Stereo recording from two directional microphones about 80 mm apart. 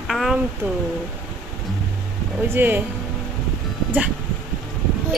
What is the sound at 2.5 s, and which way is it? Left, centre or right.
Speech, right.